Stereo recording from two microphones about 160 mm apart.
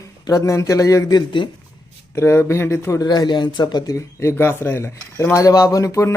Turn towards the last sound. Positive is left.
turn(degrees=20)  # may be behind; listen again after turning